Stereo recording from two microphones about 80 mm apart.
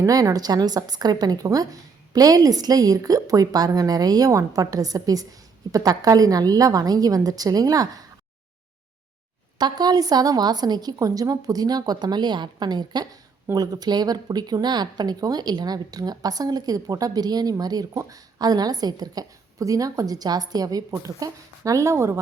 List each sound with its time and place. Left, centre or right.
0.0 s a woman's voice: right
9.6 s a woman's voice: right